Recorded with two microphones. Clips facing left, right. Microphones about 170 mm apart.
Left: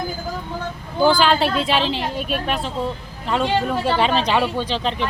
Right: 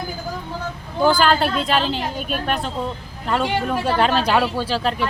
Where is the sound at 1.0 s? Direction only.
Centre (ahead or behind).